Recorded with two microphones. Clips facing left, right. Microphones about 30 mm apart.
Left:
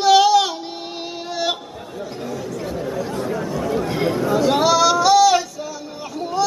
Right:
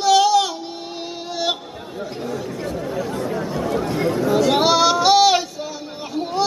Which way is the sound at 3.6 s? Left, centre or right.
Centre.